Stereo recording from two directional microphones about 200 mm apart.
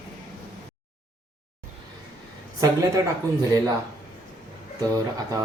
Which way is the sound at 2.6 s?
15° right (ahead or behind).